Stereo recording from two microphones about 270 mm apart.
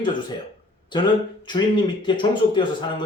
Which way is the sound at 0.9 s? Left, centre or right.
Centre.